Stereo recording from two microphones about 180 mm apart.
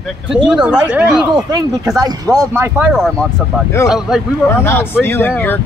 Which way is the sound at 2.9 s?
Centre (ahead or behind).